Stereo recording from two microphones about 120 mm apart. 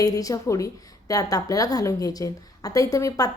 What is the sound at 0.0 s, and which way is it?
A woman's voice, 30° left (ahead or behind).